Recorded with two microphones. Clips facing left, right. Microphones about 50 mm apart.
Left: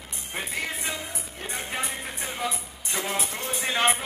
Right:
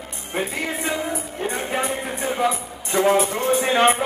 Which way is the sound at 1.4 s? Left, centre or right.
Right.